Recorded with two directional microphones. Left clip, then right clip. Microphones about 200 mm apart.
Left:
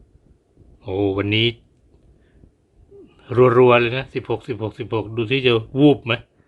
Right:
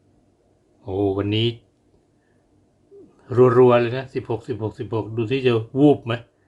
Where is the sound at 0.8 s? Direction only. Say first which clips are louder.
Left 1 dB; 25° left (ahead or behind).